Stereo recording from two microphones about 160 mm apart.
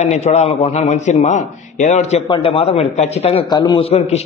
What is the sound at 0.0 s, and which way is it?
A man's voice, 45° left (ahead or behind).